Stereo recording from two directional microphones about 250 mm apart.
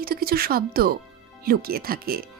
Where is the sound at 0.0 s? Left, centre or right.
Right.